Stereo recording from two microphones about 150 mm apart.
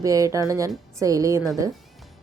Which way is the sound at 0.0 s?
20° right (ahead or behind).